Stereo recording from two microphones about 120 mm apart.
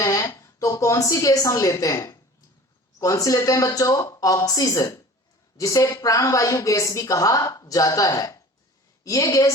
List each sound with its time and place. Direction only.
0.0 s a woman's voice: 25° left (ahead or behind)